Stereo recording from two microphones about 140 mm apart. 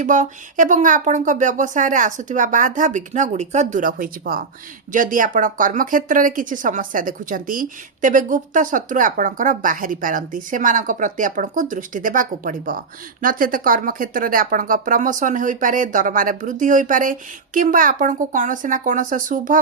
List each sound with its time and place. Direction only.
0.0 s speech: 65° right (ahead or behind); by 4.4 s 90° right
4.9 s speech: 70° right (ahead or behind)
13.2 s speech: 90° right; by 19.5 s 70° right (ahead or behind)